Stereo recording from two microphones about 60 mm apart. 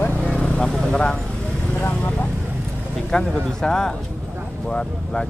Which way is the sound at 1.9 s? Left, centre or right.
Left.